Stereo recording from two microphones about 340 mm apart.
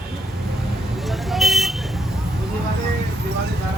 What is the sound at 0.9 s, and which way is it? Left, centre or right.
Vehicle, centre.